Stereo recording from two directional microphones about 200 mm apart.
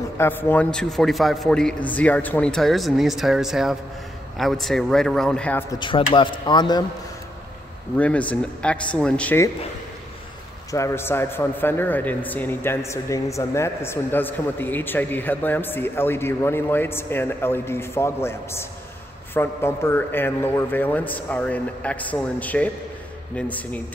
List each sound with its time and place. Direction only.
0.2 s speech: 10° left (ahead or behind)
5.8 s speech: 25° left (ahead or behind)
8.0 s a man's voice: 5° left (ahead or behind)
10.7 s a man's voice: 15° left (ahead or behind)